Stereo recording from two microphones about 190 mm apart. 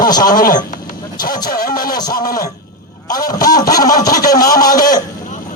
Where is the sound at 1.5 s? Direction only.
50° left (ahead or behind).